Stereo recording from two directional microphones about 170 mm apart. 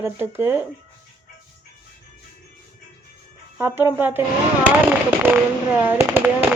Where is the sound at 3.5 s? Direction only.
15° right (ahead or behind).